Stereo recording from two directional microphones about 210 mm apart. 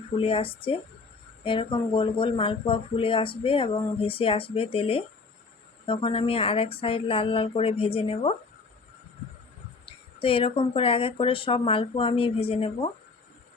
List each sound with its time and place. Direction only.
0.2 s speech: 25° left (ahead or behind)
9.8 s speech: 25° left (ahead or behind)